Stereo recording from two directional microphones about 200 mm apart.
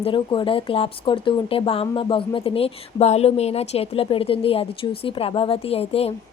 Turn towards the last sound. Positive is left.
turn(degrees=30)  # may be behind; listen again after turning